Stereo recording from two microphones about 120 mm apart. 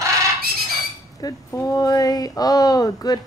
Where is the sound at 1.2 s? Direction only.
30° left (ahead or behind).